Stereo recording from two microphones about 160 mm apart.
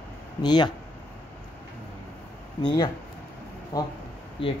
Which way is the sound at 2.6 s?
30° left (ahead or behind).